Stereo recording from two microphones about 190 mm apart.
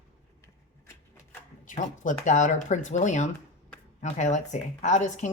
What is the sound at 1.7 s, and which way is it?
A woman's voice, 40° left (ahead or behind).